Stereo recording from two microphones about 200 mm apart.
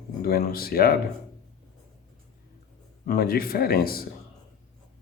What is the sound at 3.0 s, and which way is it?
Speech, 50° left (ahead or behind).